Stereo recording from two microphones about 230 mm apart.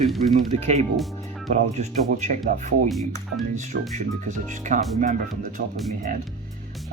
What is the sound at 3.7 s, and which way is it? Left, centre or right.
Speech, right.